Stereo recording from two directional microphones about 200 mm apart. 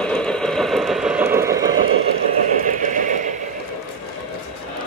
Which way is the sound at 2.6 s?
40° right (ahead or behind).